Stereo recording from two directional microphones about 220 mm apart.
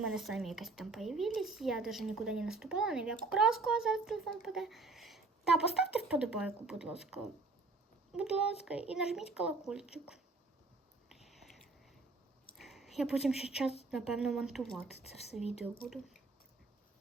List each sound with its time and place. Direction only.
0.0 s a woman's voice: centre (ahead or behind)
11.1 s a sound: centre (ahead or behind)
13.9 s a woman's voice: centre (ahead or behind)
15.0 s speech: 30° left (ahead or behind)